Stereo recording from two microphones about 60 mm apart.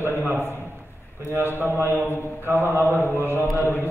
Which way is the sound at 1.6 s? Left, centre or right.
Right.